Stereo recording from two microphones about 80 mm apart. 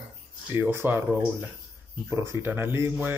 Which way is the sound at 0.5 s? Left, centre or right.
Right.